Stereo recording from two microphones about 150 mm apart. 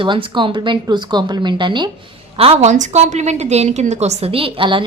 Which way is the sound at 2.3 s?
40° right (ahead or behind).